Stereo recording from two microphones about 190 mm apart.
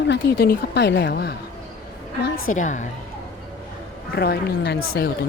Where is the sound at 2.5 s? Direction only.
40° left (ahead or behind).